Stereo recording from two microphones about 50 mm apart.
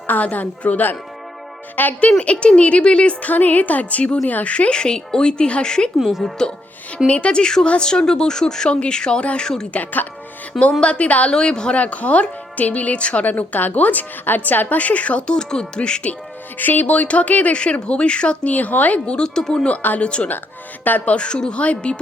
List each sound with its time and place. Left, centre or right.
0.1 s a woman's voice: left; by 5.9 s centre
6.0 s speech: centre
7.1 s speech: left
9.7 s speech: left
10.6 s a woman's voice: left
11.3 s speech: centre
11.8 s speech: left
15.4 s speech: centre
16.6 s a woman's voice: left
19.0 s speech: centre
20.0 s a woman's voice: left